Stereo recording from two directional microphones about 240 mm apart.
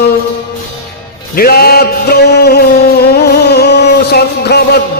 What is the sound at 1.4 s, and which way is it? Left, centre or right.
Music, left.